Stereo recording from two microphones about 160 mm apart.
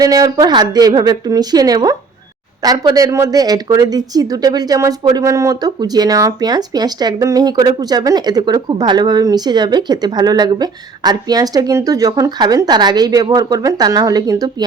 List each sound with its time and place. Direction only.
0.0 s speech: 20° right (ahead or behind)